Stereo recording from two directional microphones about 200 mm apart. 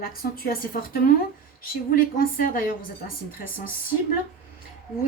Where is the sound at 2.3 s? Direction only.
45° left (ahead or behind).